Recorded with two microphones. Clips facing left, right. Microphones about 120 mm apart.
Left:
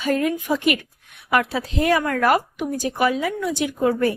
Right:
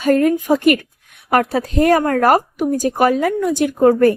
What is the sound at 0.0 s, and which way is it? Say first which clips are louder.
A woman's voice: right 7 dB; 45° right (ahead or behind).